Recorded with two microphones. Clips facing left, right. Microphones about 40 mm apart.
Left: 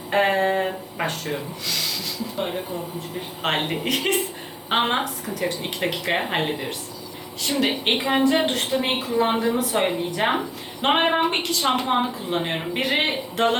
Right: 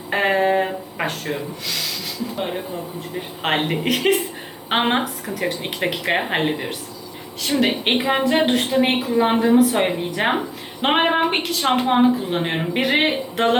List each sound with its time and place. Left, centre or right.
0.1 s speech: centre
3.2 s speech: centre
8.7 s a woman's voice: right; by 11.7 s centre
11.7 s speech: centre